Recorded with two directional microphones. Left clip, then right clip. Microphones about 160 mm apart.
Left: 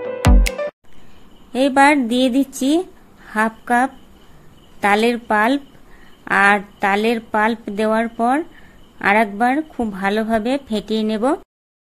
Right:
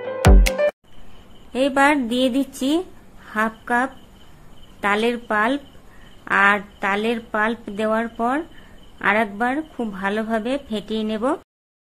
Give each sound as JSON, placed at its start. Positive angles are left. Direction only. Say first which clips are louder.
{"t": 0.2, "sound": "music", "louder": "right 2 dB", "side_deg": 0}
{"t": 1.5, "sound": "a woman's voice", "louder": "left 4 dB", "side_deg": 20}